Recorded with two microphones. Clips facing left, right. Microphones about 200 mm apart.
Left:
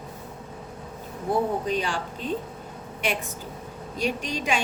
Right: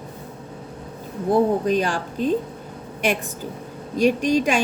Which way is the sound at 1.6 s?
45° right (ahead or behind).